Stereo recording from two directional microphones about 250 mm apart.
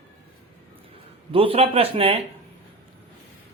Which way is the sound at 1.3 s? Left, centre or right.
Right.